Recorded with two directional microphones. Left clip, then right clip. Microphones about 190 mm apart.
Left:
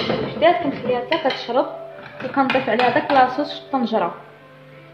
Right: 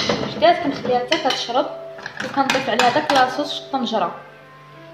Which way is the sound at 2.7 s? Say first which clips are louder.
Even; 15° left (ahead or behind).